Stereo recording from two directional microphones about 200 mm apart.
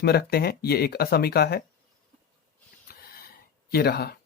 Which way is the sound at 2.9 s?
50° left (ahead or behind).